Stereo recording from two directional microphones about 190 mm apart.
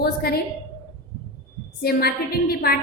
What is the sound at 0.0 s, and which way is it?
Speech, 55° left (ahead or behind).